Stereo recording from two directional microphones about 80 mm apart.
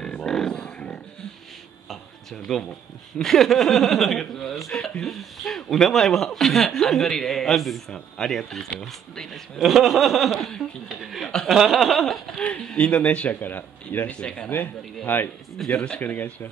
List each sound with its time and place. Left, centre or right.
0.0 s livestock: centre
3.2 s speech: centre
12.4 s speech: centre
14.1 s speech: centre
15.5 s speech: centre